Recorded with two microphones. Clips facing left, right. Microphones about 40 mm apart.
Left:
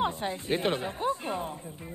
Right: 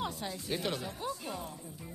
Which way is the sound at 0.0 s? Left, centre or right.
Left.